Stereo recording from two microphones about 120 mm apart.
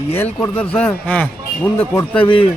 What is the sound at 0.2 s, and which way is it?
Speech, 15° left (ahead or behind).